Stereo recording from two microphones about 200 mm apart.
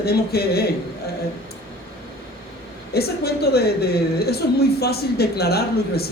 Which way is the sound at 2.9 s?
50° left (ahead or behind).